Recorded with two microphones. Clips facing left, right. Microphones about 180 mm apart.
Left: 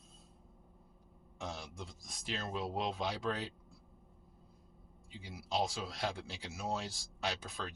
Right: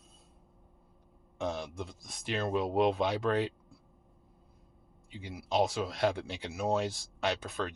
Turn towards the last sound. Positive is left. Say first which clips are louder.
# right 7 dB
turn(degrees=-65)  # may be behind; listen again after turning